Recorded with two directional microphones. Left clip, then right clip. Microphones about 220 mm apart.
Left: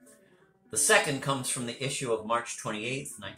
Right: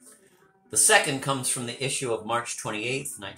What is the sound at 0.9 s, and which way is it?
Speech, 50° right (ahead or behind).